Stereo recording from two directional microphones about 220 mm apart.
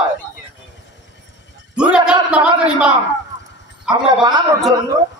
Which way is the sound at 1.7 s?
5° right (ahead or behind).